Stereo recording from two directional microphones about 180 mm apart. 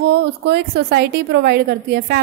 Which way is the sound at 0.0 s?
70° right (ahead or behind).